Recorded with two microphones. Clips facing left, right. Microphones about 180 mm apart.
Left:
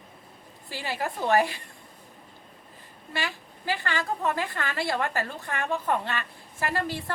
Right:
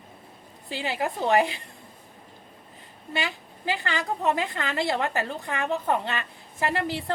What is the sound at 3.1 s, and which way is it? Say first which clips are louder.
A woman's voice: right 2 dB; 20° right (ahead or behind).